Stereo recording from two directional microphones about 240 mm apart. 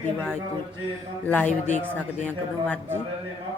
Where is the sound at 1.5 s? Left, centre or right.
Left.